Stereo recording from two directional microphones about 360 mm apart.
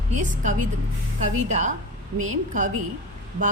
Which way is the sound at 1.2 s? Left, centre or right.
Centre.